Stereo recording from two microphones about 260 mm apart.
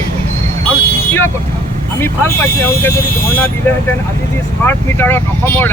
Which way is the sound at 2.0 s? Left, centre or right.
Centre.